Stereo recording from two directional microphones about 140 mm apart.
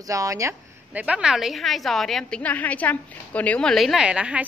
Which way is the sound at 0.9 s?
10° right (ahead or behind).